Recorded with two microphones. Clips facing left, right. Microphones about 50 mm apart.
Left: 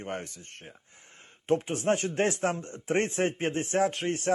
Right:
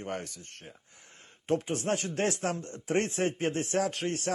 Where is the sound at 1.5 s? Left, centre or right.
Left.